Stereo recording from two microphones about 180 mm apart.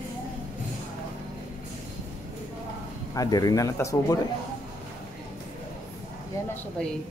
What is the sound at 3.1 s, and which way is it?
Speech, 20° left (ahead or behind).